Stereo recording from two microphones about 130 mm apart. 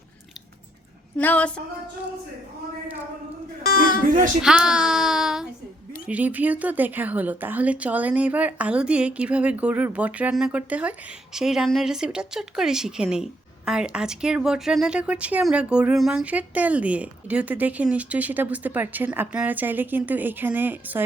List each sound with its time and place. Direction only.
1.1 s a sound: 10° left (ahead or behind)
3.8 s speech: 90° left
4.4 s a woman's voice: 5° right (ahead or behind)